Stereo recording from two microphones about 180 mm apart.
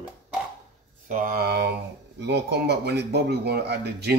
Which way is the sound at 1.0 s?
50° right (ahead or behind).